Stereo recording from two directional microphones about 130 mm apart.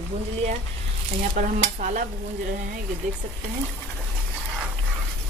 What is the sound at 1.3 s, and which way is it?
Stir, 90° right.